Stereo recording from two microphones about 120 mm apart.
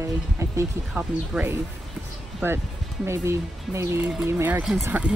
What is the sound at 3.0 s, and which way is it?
Speech, 25° right (ahead or behind).